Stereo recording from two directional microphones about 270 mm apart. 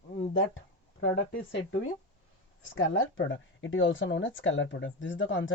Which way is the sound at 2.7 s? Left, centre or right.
Left.